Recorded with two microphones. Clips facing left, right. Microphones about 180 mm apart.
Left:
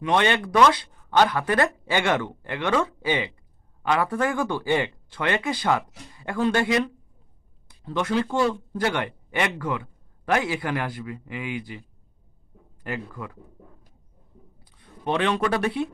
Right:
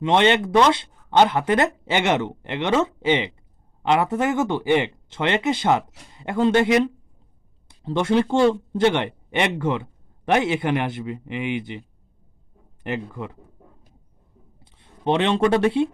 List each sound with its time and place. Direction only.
0.0 s speech: 25° right (ahead or behind)
12.8 s speech: 25° right (ahead or behind)
14.6 s speech: 25° right (ahead or behind)